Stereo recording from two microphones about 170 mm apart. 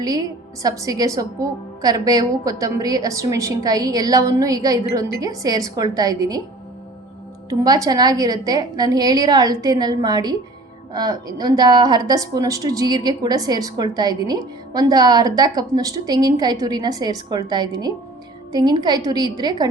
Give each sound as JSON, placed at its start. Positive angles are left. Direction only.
{"t": 0.0, "sound": "a woman's voice", "side_deg": -20}
{"t": 7.6, "sound": "a woman's voice", "side_deg": -20}